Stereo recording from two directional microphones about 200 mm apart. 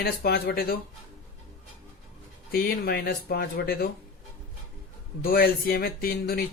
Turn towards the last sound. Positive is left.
turn(degrees=50)  # may be behind; listen again after turning